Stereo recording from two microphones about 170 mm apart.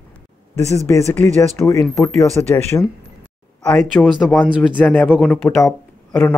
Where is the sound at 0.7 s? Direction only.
20° left (ahead or behind).